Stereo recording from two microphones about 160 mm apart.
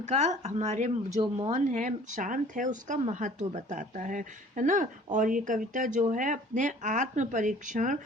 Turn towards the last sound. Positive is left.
turn(degrees=-55)  # may be behind; listen again after turning